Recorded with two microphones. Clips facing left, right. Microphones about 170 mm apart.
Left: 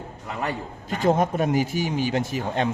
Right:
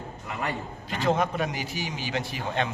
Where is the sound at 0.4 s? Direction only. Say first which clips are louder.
Left 3 dB; 45° left (ahead or behind).